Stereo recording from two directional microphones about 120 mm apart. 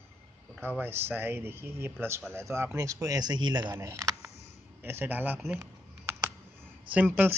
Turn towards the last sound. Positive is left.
turn(degrees=-15)  # may be behind; listen again after turning